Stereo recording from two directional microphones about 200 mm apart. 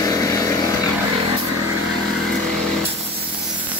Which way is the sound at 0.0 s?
15° left (ahead or behind).